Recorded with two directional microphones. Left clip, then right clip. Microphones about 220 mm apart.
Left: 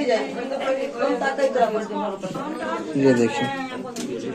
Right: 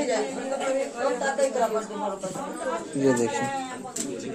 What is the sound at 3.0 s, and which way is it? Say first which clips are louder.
Speech: left 5 dB; 5° right (ahead or behind).